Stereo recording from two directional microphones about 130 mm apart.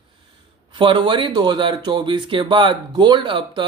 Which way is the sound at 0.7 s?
40° right (ahead or behind).